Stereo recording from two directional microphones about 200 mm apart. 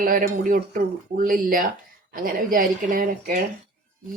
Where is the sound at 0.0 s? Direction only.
45° right (ahead or behind).